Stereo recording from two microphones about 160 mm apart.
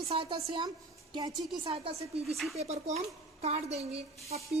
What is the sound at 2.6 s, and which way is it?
Speech, 45° right (ahead or behind).